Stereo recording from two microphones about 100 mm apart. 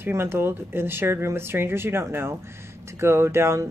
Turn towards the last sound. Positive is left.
turn(degrees=-25)  # may be behind; listen again after turning